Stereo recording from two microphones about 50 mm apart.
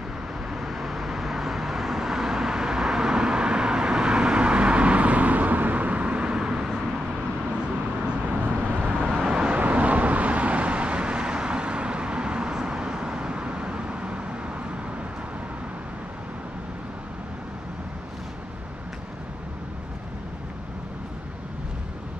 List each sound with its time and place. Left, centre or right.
0.5 s vehicle: centre
8.3 s vehicle: right
9.1 s vehicle: centre
9.6 s vehicle: right